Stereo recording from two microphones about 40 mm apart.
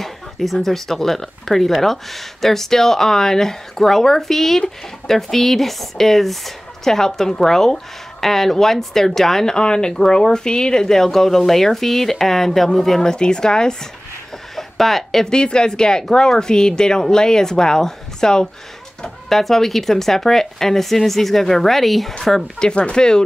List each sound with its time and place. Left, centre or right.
0.0 s speech: centre
9.6 s speech: centre
14.5 s a sound: centre
15.3 s speech: left
19.2 s speech: centre
22.2 s speech: centre